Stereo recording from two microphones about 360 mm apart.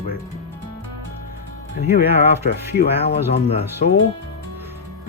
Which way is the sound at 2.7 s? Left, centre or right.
Left.